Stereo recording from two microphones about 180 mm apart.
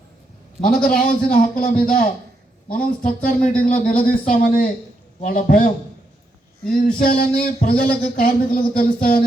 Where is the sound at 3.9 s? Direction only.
50° left (ahead or behind).